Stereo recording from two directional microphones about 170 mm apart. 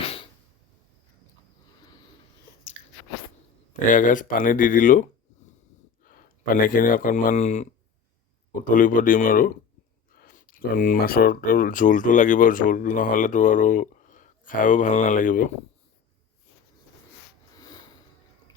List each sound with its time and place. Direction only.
3.8 s speech: 50° left (ahead or behind)
6.1 s speech: 55° left (ahead or behind)